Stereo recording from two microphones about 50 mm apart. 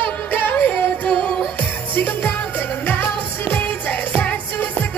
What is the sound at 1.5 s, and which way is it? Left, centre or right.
Music, left.